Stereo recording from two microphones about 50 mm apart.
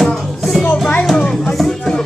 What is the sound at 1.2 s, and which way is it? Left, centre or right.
Music, centre.